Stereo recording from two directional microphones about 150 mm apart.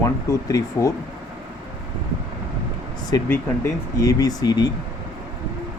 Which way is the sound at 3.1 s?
20° left (ahead or behind).